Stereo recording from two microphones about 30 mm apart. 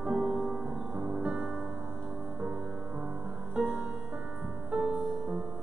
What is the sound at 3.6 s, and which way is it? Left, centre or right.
Music, right.